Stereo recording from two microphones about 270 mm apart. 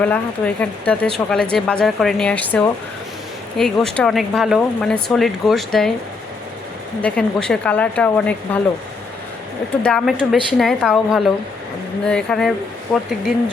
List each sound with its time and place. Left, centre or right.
0.0 s a woman's voice: centre
7.0 s a woman's voice: centre
9.8 s a woman's voice: centre